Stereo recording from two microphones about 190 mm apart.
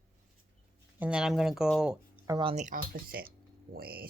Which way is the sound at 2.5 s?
40° right (ahead or behind).